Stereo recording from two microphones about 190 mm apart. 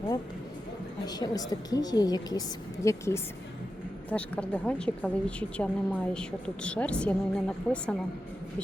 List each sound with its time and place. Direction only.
1.0 s a woman's voice: 20° left (ahead or behind); by 7.9 s 5° left (ahead or behind)